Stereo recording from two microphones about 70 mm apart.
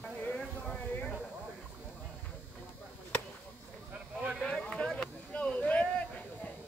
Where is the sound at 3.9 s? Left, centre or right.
Centre.